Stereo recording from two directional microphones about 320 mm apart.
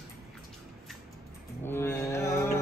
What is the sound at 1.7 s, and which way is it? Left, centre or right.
Speech, centre.